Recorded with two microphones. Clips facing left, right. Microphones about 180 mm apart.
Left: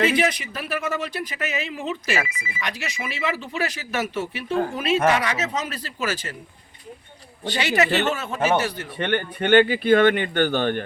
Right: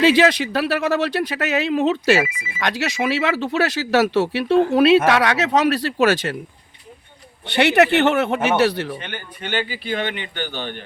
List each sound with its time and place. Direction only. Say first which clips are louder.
0.0 s speech: right 6 dB; 85° right
7.4 s speech: right 6 dB; 65° right (ahead or behind)
9.0 s speech: left 9 dB; 60° left (ahead or behind)